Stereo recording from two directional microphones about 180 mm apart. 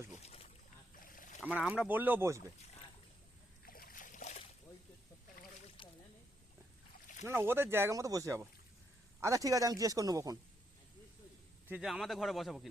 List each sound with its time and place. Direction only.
0.2 s boat: 35° left (ahead or behind)
0.9 s boat: 50° left (ahead or behind)
1.4 s speech: 5° right (ahead or behind)
3.7 s a sound: 50° left (ahead or behind)
5.6 s boat: 30° left (ahead or behind)
7.3 s a man's voice: 15° right (ahead or behind)
11.7 s speech: 5° right (ahead or behind)